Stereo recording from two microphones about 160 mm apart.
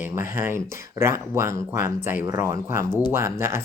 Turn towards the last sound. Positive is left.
turn(degrees=-15)  # may be behind; listen again after turning